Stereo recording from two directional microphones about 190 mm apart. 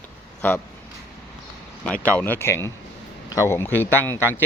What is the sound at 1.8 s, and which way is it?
Speech, 5° left (ahead or behind).